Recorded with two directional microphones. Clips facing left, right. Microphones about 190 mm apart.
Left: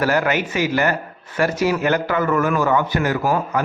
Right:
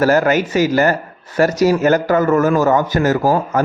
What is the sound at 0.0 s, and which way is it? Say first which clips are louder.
A man's voice: right 5 dB; 40° right (ahead or behind).